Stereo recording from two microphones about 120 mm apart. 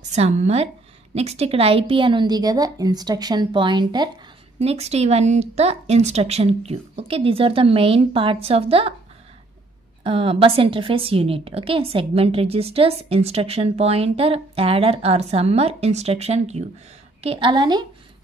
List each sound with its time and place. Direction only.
0.1 s a woman's voice: 70° right (ahead or behind); by 4.1 s 35° right (ahead or behind)
4.6 s speech: 60° right (ahead or behind)
10.0 s a woman's voice: 50° right (ahead or behind)
17.5 s a woman's voice: 35° right (ahead or behind)